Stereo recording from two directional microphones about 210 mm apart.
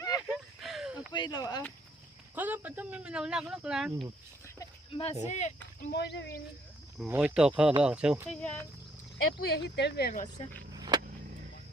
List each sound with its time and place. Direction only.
0.2 s a sound: centre (ahead or behind)
1.1 s speech: 20° left (ahead or behind)
2.3 s speech: 10° right (ahead or behind)
4.4 s a sound: 15° left (ahead or behind)
4.9 s speech: 25° left (ahead or behind)
5.8 s speech: 50° left (ahead or behind)
7.0 s speech: 5° right (ahead or behind)
8.4 s speech: 5° left (ahead or behind)
9.5 s speech: 55° left (ahead or behind)
10.8 s vehicle: 20° right (ahead or behind)